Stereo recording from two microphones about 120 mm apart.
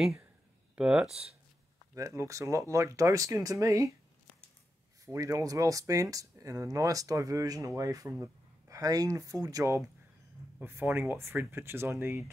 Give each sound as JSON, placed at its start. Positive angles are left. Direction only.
{"t": 0.0, "sound": "speech", "side_deg": 0}
{"t": 2.0, "sound": "speech", "side_deg": -25}
{"t": 5.0, "sound": "speech", "side_deg": -25}